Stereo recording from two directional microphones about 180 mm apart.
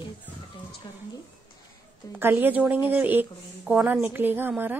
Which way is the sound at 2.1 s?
10° right (ahead or behind).